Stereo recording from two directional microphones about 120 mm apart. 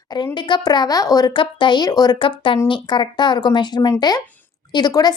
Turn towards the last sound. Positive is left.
turn(degrees=35)  # may be behind; listen again after turning